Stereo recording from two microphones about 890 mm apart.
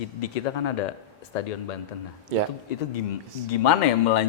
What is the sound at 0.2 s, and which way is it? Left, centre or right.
Speech, left.